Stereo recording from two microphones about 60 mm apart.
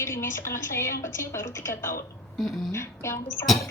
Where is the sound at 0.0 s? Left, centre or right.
Left.